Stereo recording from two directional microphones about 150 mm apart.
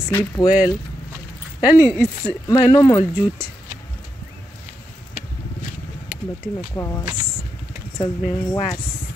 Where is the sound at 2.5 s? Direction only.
25° left (ahead or behind).